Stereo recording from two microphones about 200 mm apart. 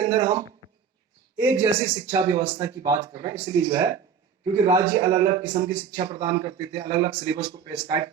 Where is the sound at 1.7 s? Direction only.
15° right (ahead or behind).